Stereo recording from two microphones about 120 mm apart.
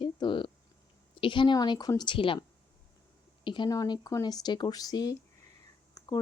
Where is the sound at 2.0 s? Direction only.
45° left (ahead or behind).